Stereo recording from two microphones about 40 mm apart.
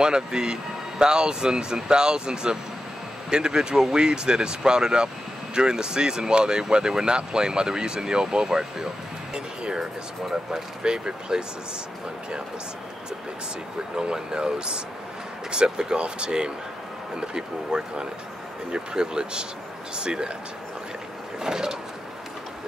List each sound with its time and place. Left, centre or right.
0.0 s speech: centre
13.9 s speech: centre
21.4 s a sound: centre